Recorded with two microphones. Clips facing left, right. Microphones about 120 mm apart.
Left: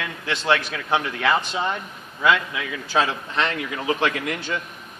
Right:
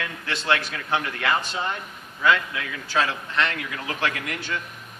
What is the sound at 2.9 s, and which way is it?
A man's voice, 20° left (ahead or behind).